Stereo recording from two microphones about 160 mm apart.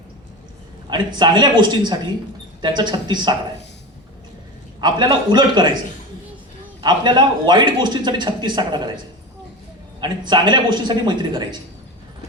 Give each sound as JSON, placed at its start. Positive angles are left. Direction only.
{"t": 0.9, "sound": "a man's voice", "side_deg": -30}
{"t": 4.8, "sound": "a man's voice", "side_deg": -25}
{"t": 6.8, "sound": "a man's voice", "side_deg": -25}
{"t": 10.0, "sound": "a man's voice", "side_deg": -30}